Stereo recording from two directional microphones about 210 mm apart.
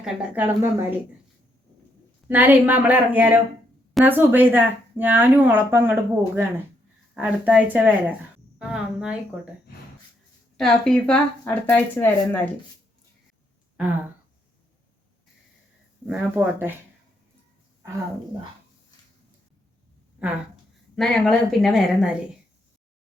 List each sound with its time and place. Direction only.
0.0 s speech: 5° right (ahead or behind)
2.2 s speech: 10° right (ahead or behind)
10.6 s speech: 5° left (ahead or behind)
16.0 s speech: 10° right (ahead or behind)
20.9 s speech: 5° left (ahead or behind)